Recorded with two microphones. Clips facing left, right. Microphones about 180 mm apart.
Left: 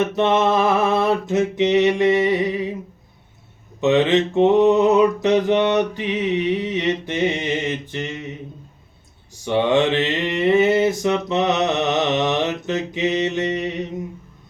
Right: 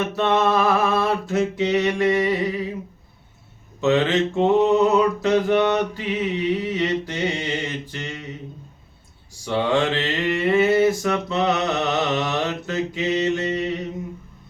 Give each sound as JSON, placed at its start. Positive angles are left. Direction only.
{"t": 0.2, "sound": "mantra", "side_deg": 20}
{"t": 3.8, "sound": "mantra", "side_deg": 20}
{"t": 9.4, "sound": "mantra", "side_deg": 20}